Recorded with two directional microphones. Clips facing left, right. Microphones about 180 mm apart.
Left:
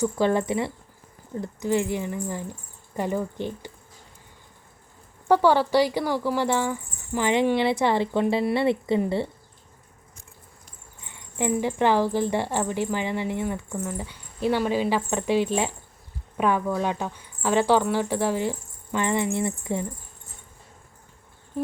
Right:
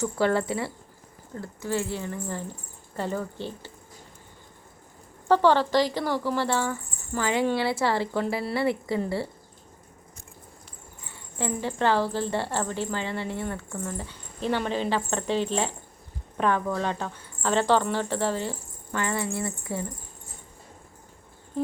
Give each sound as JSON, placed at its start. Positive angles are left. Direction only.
{"t": 0.0, "sound": "speech", "side_deg": 20}
{"t": 5.3, "sound": "speech", "side_deg": 10}
{"t": 11.0, "sound": "speech", "side_deg": 15}